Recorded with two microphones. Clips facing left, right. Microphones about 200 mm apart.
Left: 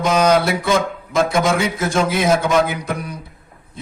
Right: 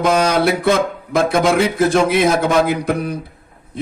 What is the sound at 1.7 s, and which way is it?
A man's voice, 60° right (ahead or behind).